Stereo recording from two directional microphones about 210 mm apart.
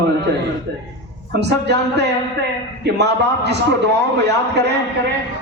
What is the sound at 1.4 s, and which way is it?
A man's voice, 55° right (ahead or behind).